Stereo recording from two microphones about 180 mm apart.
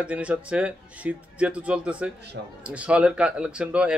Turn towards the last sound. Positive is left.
turn(degrees=-5)  # may be behind; listen again after turning